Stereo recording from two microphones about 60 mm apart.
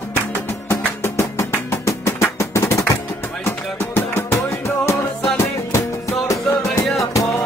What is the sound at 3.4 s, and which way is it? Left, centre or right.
Music, left.